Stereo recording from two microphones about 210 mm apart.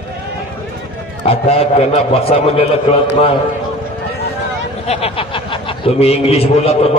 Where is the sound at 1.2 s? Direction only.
30° left (ahead or behind).